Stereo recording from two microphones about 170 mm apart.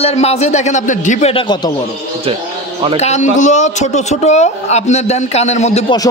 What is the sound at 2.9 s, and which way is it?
A man's voice, 40° left (ahead or behind).